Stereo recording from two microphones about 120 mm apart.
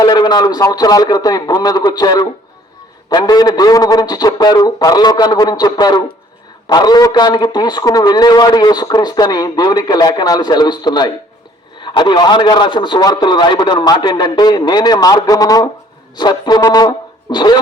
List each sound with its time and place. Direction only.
0.0 s a man's voice: 35° left (ahead or behind)